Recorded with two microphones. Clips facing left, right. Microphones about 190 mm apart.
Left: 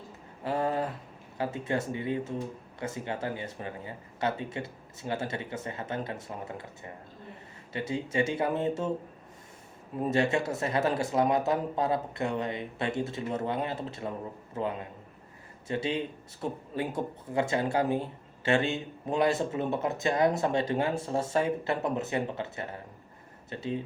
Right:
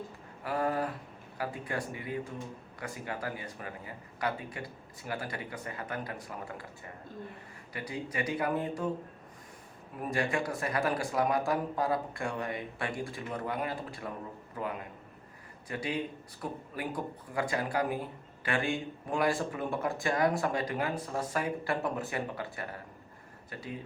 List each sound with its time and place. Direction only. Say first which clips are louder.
0.4 s speech: left 2 dB; 25° left (ahead or behind)
10.0 s speech: left 5 dB; 25° left (ahead or behind)